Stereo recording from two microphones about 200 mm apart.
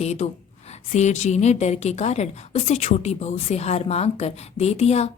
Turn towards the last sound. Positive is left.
turn(degrees=30)  # may be behind; listen again after turning